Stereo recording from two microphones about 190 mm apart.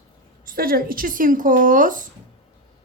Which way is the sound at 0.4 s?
50° right (ahead or behind).